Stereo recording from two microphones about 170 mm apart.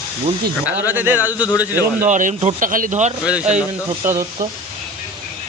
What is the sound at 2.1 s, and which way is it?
Speech, 45° right (ahead or behind).